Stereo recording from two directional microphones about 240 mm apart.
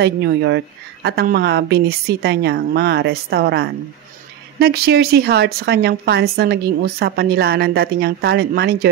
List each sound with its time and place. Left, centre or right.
0.0 s a woman's voice: right